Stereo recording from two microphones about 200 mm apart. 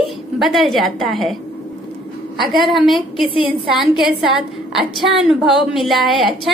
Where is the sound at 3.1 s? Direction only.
25° left (ahead or behind).